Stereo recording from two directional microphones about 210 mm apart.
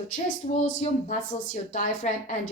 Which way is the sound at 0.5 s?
35° left (ahead or behind).